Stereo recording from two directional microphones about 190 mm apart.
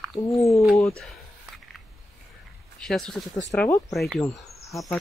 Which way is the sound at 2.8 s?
5° left (ahead or behind).